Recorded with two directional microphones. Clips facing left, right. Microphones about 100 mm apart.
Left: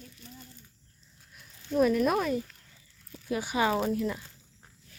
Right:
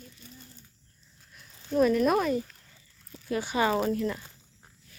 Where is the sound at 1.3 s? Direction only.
5° left (ahead or behind).